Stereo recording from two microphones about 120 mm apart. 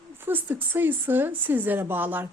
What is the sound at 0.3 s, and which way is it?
A woman's voice, 15° right (ahead or behind).